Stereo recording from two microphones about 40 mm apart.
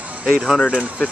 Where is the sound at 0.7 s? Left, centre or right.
Left.